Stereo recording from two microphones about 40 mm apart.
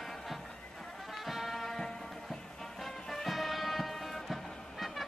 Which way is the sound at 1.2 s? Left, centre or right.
Centre.